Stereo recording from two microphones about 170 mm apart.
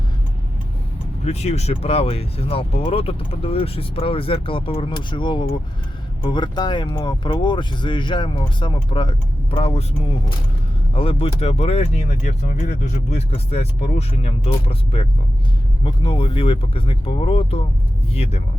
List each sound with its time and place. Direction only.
1.2 s speech: 40° left (ahead or behind)
10.9 s speech: 35° left (ahead or behind)